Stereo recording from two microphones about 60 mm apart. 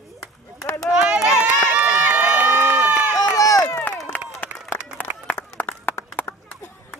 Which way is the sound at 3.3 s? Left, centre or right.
Left.